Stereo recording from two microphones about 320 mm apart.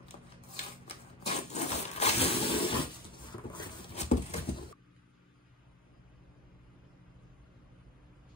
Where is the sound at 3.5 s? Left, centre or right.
Left.